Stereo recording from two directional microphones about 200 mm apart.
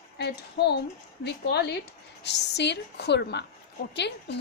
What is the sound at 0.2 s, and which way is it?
A woman's voice, 55° left (ahead or behind).